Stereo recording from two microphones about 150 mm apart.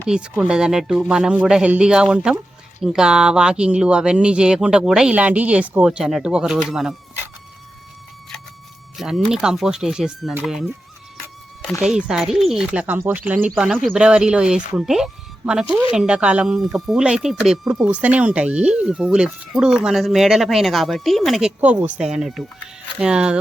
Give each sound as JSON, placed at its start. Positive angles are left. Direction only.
{"t": 0.1, "sound": "speech", "side_deg": -5}
{"t": 9.0, "sound": "speech", "side_deg": 0}
{"t": 11.8, "sound": "speech", "side_deg": -5}
{"t": 13.6, "sound": "speech", "side_deg": 0}